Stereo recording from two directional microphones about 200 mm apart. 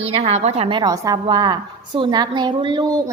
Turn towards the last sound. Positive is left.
turn(degrees=-20)  # may be behind; listen again after turning